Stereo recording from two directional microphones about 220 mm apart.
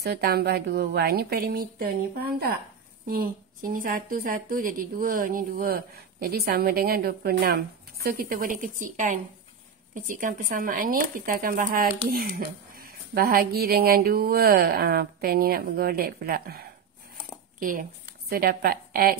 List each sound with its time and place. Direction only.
0.0 s a woman's voice: 45° right (ahead or behind)